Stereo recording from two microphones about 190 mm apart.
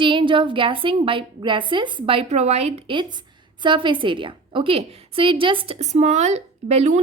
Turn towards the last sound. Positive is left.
turn(degrees=-35)  # may be behind; listen again after turning